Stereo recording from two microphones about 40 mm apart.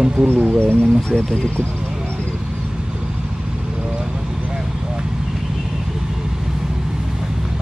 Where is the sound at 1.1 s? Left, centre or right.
Left.